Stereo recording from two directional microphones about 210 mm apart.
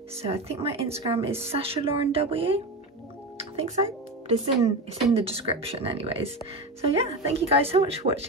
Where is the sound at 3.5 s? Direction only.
30° right (ahead or behind).